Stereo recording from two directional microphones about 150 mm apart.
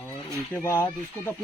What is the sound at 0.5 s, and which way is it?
Speech, 15° left (ahead or behind).